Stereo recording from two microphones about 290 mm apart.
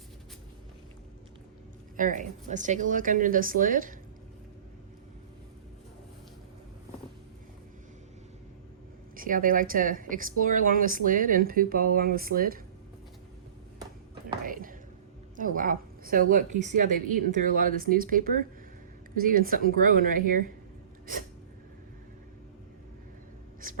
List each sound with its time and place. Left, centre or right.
2.0 s speech: right
9.1 s speech: right
14.4 s a sound: right
15.4 s a woman's voice: right